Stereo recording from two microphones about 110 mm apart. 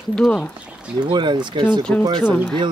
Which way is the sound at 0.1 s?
10° left (ahead or behind).